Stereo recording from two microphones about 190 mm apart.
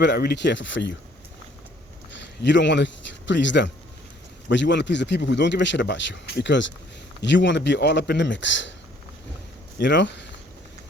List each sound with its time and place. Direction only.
0.0 s speech: 60° left (ahead or behind)
2.4 s speech: 70° left (ahead or behind)
9.7 s speech: 70° left (ahead or behind)